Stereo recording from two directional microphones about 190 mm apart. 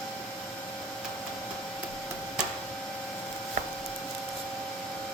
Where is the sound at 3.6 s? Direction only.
45° right (ahead or behind).